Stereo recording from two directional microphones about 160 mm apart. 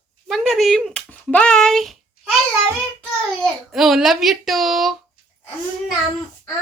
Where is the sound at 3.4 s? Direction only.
Centre (ahead or behind).